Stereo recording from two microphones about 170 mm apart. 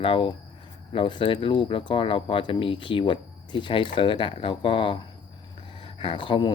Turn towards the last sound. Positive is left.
turn(degrees=30)  # may be behind; listen again after turning